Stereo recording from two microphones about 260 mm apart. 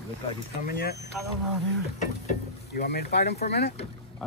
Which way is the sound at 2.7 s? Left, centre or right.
Left.